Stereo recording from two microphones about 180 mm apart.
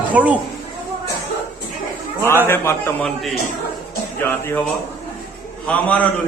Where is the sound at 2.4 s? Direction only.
15° left (ahead or behind).